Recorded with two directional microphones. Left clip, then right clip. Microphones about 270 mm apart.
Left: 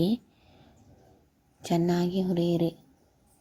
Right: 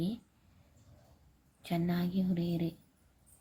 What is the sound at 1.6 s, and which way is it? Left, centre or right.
Speech, left.